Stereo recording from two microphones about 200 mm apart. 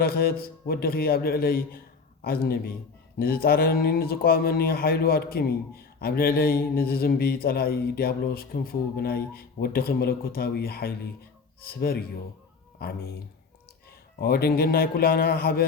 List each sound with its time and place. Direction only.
0.0 s speech: 50° left (ahead or behind)
14.2 s speech: 50° left (ahead or behind)